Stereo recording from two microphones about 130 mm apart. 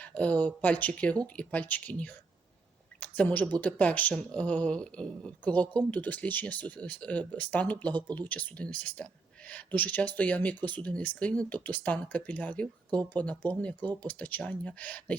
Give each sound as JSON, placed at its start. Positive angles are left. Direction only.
{"t": 0.0, "sound": "speech", "side_deg": 10}